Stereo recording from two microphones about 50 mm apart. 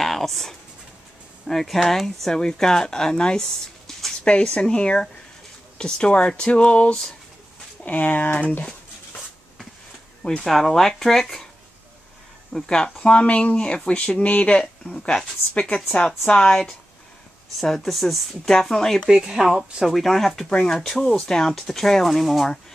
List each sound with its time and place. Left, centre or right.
0.0 s speech: centre; by 8.6 s left
10.2 s speech: centre
12.5 s speech: centre
16.3 s speech: centre
19.0 s speech: centre